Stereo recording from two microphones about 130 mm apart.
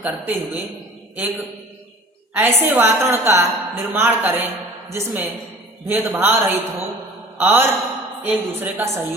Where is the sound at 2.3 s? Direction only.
15° right (ahead or behind).